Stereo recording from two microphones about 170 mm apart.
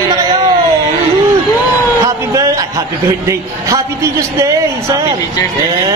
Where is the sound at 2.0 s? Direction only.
20° right (ahead or behind).